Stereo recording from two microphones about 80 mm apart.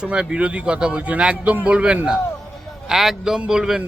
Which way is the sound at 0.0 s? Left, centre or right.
Centre.